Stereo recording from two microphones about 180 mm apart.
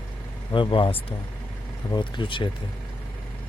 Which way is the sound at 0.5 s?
25° left (ahead or behind).